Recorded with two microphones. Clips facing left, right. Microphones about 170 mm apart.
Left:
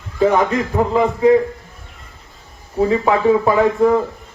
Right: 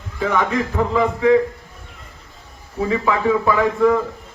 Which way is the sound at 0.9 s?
30° left (ahead or behind).